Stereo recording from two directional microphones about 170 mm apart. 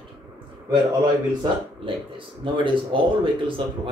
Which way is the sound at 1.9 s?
30° right (ahead or behind).